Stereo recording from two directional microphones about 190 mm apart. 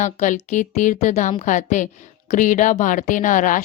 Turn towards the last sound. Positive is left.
turn(degrees=45)  # may be behind; listen again after turning